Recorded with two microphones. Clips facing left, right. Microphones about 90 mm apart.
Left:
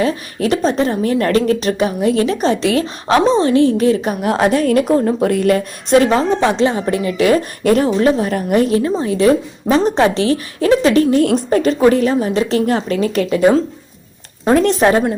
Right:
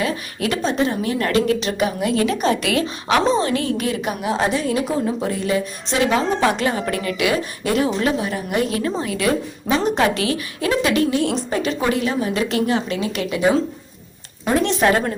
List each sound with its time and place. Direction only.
0.0 s a woman's voice: 30° left (ahead or behind)
4.2 s speech: 60° left (ahead or behind)
6.3 s a woman's voice: 25° left (ahead or behind)
7.2 s a woman's voice: 45° left (ahead or behind)
7.9 s a woman's voice: 35° left (ahead or behind)
8.3 s a woman's voice: 50° left (ahead or behind)
8.6 s a woman's voice: 30° left (ahead or behind)
11.2 s a woman's voice: 50° left (ahead or behind); by 12.6 s 30° left (ahead or behind)
12.6 s a woman's voice: 45° left (ahead or behind)